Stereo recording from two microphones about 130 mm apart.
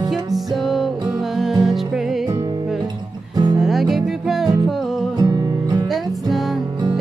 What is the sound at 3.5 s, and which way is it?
Music, centre (ahead or behind).